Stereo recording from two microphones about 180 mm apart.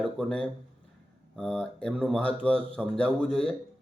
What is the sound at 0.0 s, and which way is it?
Speech, 5° left (ahead or behind).